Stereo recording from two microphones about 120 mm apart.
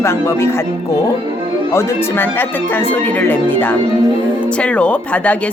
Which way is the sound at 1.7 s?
20° left (ahead or behind).